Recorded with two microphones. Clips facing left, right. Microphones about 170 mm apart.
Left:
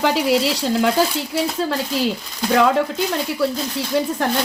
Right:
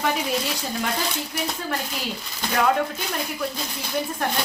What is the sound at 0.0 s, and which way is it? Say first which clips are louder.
Speech: left 7 dB; 85° left.